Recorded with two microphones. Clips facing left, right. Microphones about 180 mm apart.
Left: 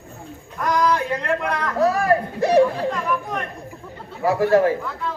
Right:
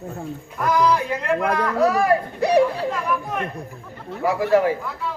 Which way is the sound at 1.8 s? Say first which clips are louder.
Left 1 dB; 15° right (ahead or behind).